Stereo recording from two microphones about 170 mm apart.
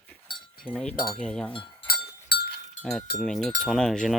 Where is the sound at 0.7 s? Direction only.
5° left (ahead or behind).